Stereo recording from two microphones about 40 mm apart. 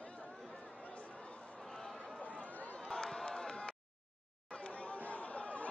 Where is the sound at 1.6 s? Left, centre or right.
Centre.